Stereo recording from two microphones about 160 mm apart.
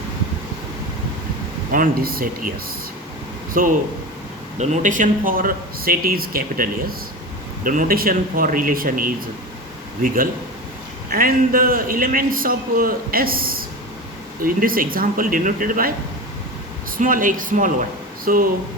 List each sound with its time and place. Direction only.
1.7 s a man's voice: 60° right (ahead or behind)
3.5 s speech: 60° right (ahead or behind)
4.5 s a man's voice: 45° right (ahead or behind)
11.1 s a man's voice: 65° right (ahead or behind)
17.0 s a man's voice: 55° right (ahead or behind)